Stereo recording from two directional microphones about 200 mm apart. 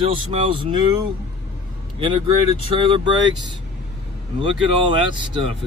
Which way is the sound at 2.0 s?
25° right (ahead or behind).